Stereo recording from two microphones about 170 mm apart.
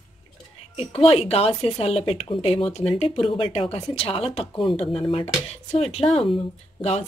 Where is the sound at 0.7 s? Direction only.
35° left (ahead or behind).